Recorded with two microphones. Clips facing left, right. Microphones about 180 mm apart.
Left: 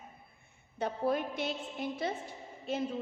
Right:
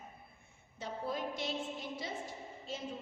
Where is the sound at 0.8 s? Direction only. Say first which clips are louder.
Left 7 dB; 60° left (ahead or behind).